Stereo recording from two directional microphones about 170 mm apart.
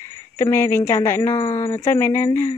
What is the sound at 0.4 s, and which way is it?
Speech, 15° left (ahead or behind).